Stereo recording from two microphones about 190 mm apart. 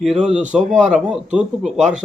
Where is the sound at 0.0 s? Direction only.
Centre (ahead or behind).